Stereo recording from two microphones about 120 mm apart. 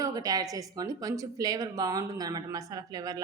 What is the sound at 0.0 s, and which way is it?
A woman's voice, 30° right (ahead or behind).